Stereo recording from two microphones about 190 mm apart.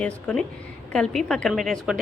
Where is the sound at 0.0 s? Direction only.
5° left (ahead or behind).